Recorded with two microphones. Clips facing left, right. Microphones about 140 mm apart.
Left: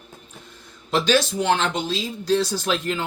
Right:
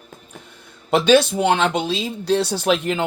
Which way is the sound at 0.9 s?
60° right (ahead or behind).